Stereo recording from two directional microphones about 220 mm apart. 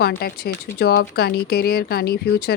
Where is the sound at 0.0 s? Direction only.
45° left (ahead or behind).